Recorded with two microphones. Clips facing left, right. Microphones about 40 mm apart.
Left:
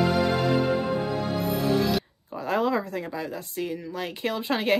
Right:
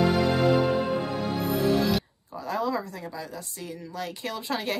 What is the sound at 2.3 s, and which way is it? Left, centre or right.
Speech, left.